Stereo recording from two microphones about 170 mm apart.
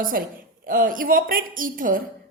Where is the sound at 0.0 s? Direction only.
55° right (ahead or behind).